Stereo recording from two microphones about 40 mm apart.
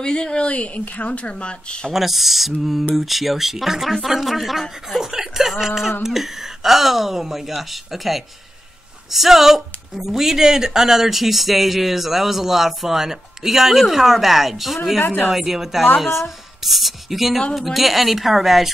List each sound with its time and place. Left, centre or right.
0.0 s speech: left
0.5 s speech: left
1.9 s speech: centre
5.0 s chuckle: centre
5.5 s speech: centre
15.0 s speech: left
15.3 s speech: centre